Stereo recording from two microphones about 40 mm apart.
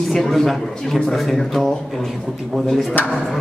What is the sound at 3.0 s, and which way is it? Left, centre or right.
Speech, left.